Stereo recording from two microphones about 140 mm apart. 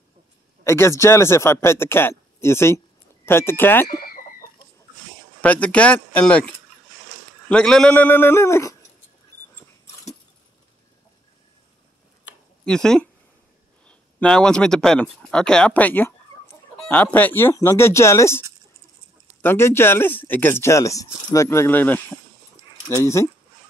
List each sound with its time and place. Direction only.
0.7 s speech: 20° left (ahead or behind)
3.9 s chicken: 90° left
5.4 s speech: 10° left (ahead or behind)
12.6 s speech: 5° left (ahead or behind)
19.4 s speech: 15° left (ahead or behind)